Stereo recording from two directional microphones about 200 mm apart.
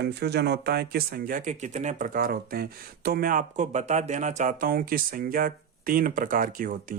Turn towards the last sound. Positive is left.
turn(degrees=-40)  # may be behind; listen again after turning